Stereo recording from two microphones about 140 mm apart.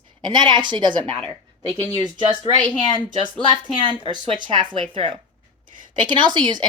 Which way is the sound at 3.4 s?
35° right (ahead or behind).